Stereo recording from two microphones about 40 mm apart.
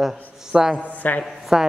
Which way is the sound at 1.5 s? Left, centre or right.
Centre.